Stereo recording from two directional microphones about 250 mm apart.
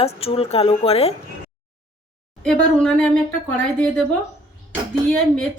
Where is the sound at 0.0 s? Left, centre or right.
Left.